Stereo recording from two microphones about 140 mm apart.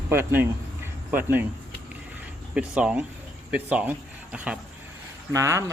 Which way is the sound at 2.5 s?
10° right (ahead or behind).